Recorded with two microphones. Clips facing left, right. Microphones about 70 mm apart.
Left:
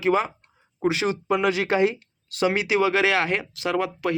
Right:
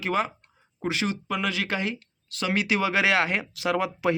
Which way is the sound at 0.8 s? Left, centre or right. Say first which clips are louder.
Left 5 dB; centre.